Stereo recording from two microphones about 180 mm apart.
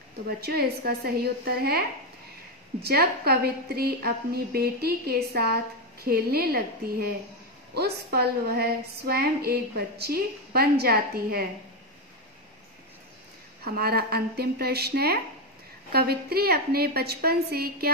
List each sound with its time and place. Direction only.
0.4 s a woman's voice: 60° right (ahead or behind)
2.8 s a woman's voice: 60° right (ahead or behind)
13.7 s a woman's voice: 60° right (ahead or behind)